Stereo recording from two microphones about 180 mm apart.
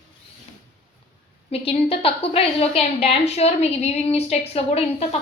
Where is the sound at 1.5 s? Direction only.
30° left (ahead or behind).